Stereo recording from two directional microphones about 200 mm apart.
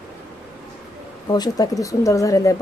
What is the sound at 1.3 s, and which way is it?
Speech, 20° left (ahead or behind).